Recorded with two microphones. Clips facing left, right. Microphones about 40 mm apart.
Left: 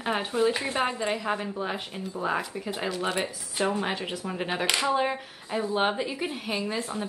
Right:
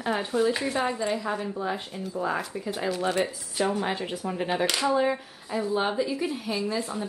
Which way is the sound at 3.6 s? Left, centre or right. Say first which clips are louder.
Even; left.